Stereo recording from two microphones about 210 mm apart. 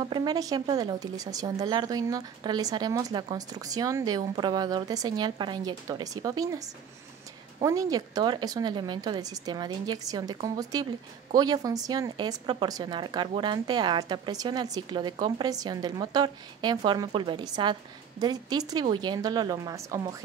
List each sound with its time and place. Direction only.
0.0 s a woman's voice: 20° right (ahead or behind)